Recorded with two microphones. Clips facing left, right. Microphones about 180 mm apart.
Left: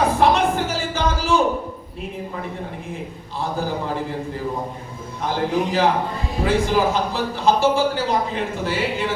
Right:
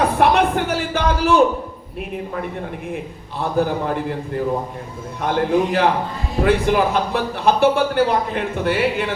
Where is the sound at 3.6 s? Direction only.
60° right (ahead or behind).